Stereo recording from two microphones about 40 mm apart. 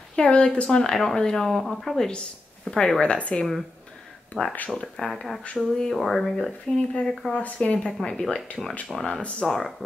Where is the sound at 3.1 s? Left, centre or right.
Left.